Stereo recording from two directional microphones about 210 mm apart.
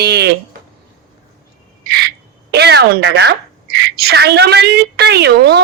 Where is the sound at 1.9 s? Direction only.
50° right (ahead or behind).